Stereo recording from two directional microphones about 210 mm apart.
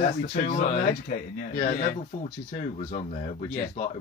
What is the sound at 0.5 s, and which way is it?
Speech, 35° left (ahead or behind).